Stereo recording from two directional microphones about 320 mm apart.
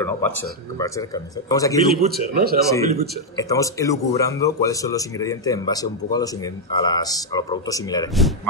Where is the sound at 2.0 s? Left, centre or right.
Right.